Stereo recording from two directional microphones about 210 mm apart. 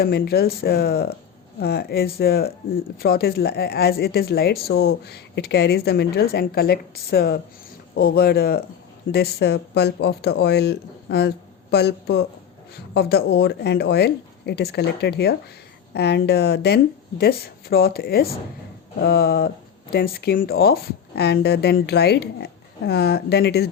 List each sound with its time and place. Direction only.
0.0 s speech: 50° left (ahead or behind)